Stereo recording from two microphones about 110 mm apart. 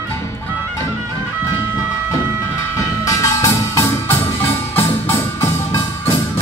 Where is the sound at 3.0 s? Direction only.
30° left (ahead or behind).